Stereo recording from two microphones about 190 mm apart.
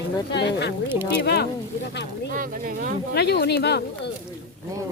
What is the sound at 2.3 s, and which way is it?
Speech, 45° right (ahead or behind).